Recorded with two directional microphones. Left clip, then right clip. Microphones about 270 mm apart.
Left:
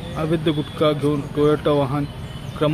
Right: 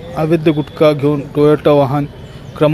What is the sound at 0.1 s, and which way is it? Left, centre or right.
Speech, right.